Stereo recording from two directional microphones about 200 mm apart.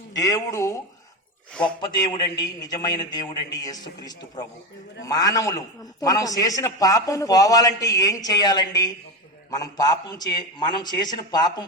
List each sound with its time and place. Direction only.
0.1 s a man's voice: 15° left (ahead or behind)
1.8 s a man's voice: 20° left (ahead or behind)